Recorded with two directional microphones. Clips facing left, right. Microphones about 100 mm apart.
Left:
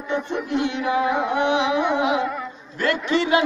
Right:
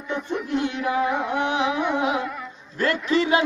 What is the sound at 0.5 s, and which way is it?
Music, 45° right (ahead or behind).